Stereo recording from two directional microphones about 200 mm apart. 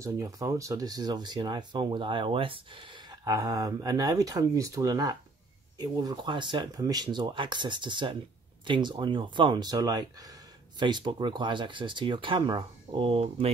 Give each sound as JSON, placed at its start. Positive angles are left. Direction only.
{"t": 0.0, "sound": "speech", "side_deg": -15}